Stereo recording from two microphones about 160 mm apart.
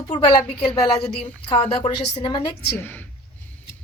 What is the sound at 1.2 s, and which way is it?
A woman's voice, 35° left (ahead or behind).